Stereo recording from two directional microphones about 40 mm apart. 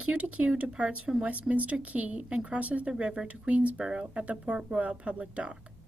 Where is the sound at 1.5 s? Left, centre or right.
Right.